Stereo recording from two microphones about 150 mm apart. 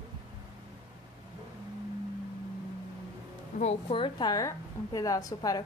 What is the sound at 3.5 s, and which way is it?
Speech, 60° left (ahead or behind).